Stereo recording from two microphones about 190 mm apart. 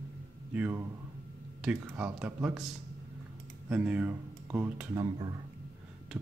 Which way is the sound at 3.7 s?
5° right (ahead or behind).